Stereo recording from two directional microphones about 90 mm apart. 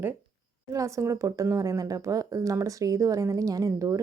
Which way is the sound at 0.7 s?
35° right (ahead or behind).